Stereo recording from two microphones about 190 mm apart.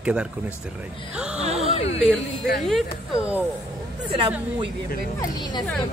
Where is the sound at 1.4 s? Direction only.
35° right (ahead or behind).